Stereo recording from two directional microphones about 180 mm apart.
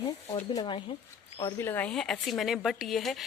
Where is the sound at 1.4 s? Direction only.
15° left (ahead or behind).